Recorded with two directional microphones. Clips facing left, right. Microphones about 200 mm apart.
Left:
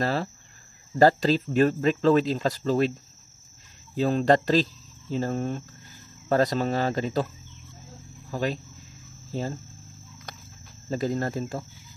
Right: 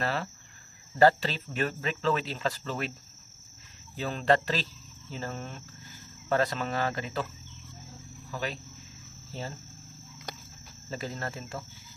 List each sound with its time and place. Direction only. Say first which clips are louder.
0.0 s speech: left 5 dB; 35° left (ahead or behind)
4.0 s speech: left 5 dB; 40° left (ahead or behind)
8.3 s speech: left 7 dB; 40° left (ahead or behind)
10.9 s speech: left 9 dB; 40° left (ahead or behind)